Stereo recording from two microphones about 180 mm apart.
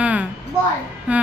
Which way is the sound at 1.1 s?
5° right (ahead or behind).